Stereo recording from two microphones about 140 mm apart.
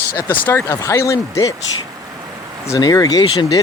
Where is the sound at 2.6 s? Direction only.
25° left (ahead or behind).